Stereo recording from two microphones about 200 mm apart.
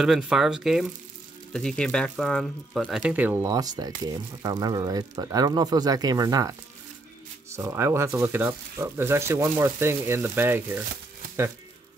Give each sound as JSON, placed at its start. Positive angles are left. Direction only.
{"t": 0.0, "sound": "speech", "side_deg": 0}
{"t": 7.5, "sound": "speech", "side_deg": -15}